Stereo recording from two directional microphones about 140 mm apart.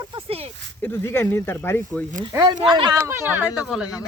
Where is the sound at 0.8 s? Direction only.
15° left (ahead or behind).